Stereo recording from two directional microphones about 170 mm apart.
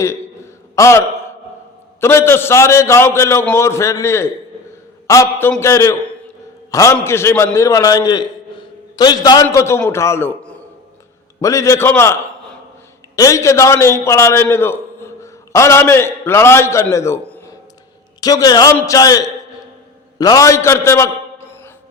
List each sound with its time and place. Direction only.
0.8 s a man's voice: 15° left (ahead or behind)
13.1 s a man's voice: 20° left (ahead or behind)